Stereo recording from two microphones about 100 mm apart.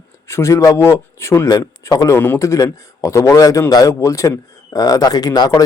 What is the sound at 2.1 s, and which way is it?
Speech, 25° left (ahead or behind).